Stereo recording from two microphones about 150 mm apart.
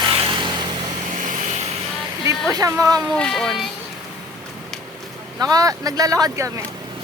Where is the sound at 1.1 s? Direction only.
55° right (ahead or behind).